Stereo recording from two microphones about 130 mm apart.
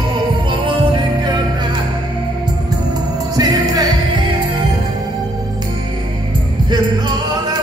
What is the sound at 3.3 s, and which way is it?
Music, 30° right (ahead or behind).